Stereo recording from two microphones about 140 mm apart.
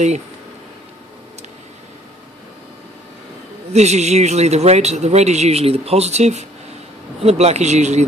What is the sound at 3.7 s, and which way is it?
Speech, 55° right (ahead or behind).